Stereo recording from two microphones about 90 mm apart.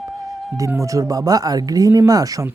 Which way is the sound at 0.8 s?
35° right (ahead or behind).